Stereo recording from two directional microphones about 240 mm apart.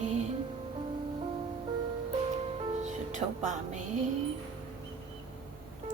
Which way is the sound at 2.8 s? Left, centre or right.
Right.